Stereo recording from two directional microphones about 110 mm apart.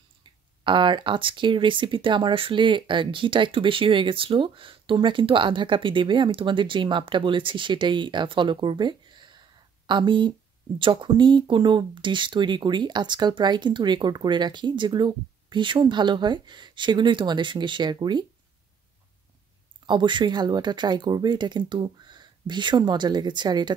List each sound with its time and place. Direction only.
0.2 s speech: 45° right (ahead or behind)
19.9 s speech: 45° right (ahead or behind)